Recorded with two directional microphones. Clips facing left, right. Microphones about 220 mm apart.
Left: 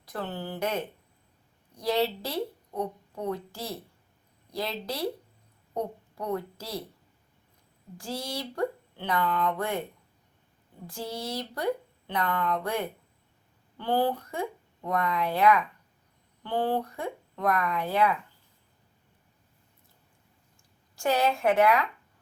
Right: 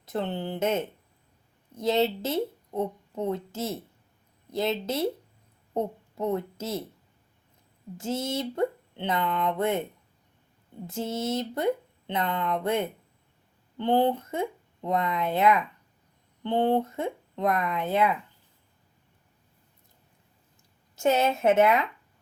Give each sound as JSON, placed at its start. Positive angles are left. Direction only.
{"t": 0.0, "sound": "speech", "side_deg": -25}
{"t": 7.9, "sound": "speech", "side_deg": -25}
{"t": 10.8, "sound": "speech", "side_deg": -25}
{"t": 20.9, "sound": "speech", "side_deg": -20}